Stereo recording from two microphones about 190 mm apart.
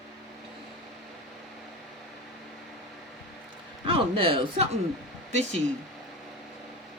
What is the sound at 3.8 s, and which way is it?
Speech, 30° right (ahead or behind).